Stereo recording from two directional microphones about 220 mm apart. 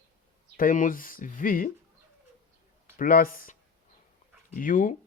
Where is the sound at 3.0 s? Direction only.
40° left (ahead or behind).